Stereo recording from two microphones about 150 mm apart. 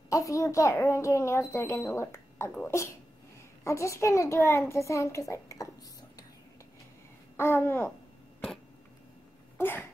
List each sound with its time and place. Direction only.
0.1 s a child's voice: 20° left (ahead or behind)
7.3 s a child's voice: 15° left (ahead or behind)
9.6 s a sound: 15° left (ahead or behind)